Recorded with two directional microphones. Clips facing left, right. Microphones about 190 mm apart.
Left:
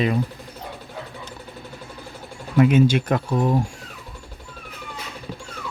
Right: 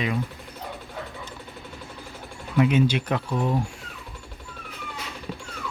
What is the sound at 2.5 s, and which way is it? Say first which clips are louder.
Speech: left 4 dB; 45° left (ahead or behind).